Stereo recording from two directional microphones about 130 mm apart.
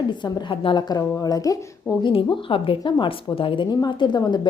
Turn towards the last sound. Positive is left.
turn(degrees=35)  # may be behind; listen again after turning